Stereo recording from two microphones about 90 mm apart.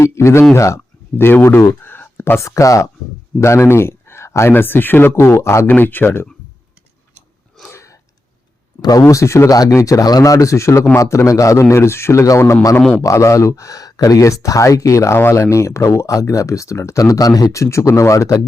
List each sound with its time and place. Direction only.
0.0 s speech: 30° left (ahead or behind)
1.1 s speech: 25° left (ahead or behind)
8.8 s speech: 45° left (ahead or behind)